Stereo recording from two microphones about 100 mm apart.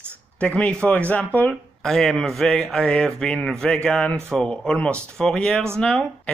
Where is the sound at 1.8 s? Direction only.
Centre (ahead or behind).